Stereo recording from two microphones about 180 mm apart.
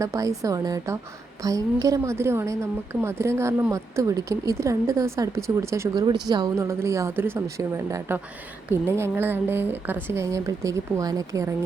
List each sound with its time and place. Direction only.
0.0 s a woman's voice: 15° right (ahead or behind)